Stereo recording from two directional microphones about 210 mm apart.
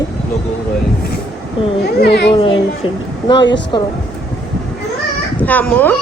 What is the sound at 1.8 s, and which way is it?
Speech, 50° left (ahead or behind).